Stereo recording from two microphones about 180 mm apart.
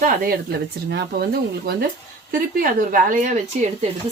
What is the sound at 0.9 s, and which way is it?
Speech, 65° right (ahead or behind).